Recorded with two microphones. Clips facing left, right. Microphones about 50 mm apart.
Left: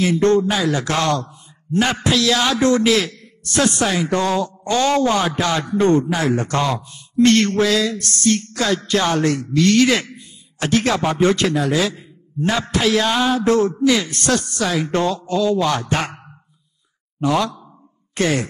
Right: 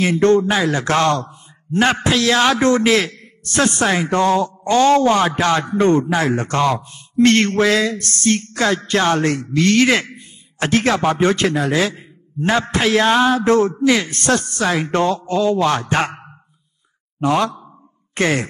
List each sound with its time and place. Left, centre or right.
0.0 s a man's voice: right